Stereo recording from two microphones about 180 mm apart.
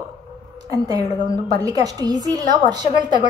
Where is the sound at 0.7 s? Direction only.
20° right (ahead or behind).